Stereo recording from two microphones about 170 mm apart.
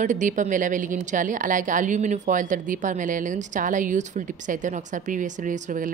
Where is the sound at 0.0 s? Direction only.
45° right (ahead or behind).